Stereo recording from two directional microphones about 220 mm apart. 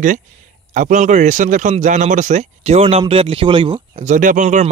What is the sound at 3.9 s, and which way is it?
Speech, 35° right (ahead or behind).